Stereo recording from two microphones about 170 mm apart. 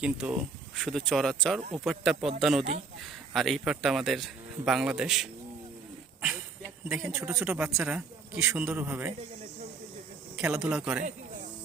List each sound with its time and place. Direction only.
0.0 s speech: 5° right (ahead or behind)
7.0 s speech: 15° right (ahead or behind)
7.6 s speech: 5° right (ahead or behind)
8.4 s speech: 15° right (ahead or behind)
10.3 s speech: 5° right (ahead or behind)